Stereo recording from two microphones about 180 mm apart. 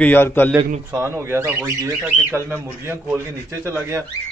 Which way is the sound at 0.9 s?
15° right (ahead or behind).